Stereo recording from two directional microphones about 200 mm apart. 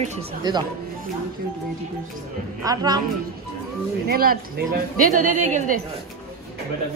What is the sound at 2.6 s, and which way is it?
Speech, 20° right (ahead or behind).